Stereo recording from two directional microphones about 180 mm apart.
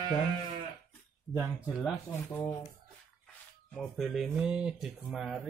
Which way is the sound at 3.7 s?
Centre (ahead or behind).